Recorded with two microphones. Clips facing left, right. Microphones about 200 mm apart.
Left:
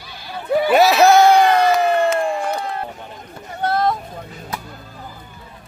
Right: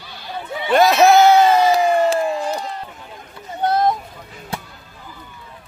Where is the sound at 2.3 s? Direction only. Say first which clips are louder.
Left 1 dB; 60° left (ahead or behind).